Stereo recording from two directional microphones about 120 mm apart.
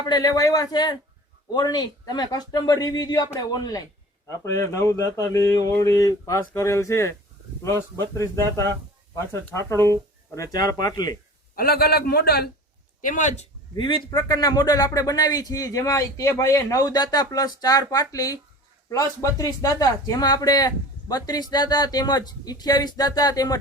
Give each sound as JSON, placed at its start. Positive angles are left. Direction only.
{"t": 0.0, "sound": "speech", "side_deg": 35}
{"t": 13.0, "sound": "speech", "side_deg": 90}
{"t": 13.7, "sound": "a man's voice", "side_deg": 45}
{"t": 14.1, "sound": "speech", "side_deg": 30}